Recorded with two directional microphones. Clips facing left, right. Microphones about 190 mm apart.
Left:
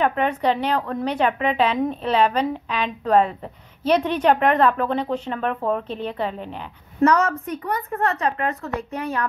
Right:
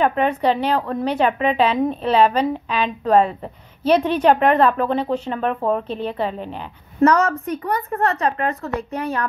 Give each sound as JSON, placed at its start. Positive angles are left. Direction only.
{"t": 0.0, "sound": "a woman's voice", "side_deg": -30}